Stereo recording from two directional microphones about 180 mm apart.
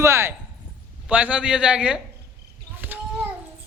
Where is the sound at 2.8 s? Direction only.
10° right (ahead or behind).